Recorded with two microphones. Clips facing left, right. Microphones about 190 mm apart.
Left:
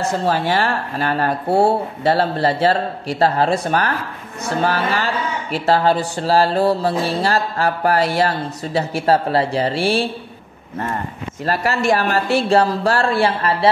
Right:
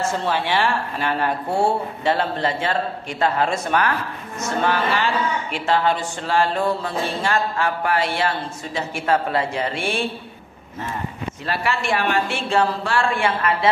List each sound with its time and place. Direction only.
0.0 s a woman's voice: 40° left (ahead or behind)
11.4 s a woman's voice: 40° left (ahead or behind)